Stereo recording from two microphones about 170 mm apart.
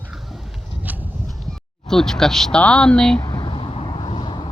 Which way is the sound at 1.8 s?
5° left (ahead or behind).